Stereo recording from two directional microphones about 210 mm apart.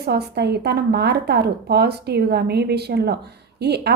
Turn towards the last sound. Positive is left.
turn(degrees=-50)  # may be behind; listen again after turning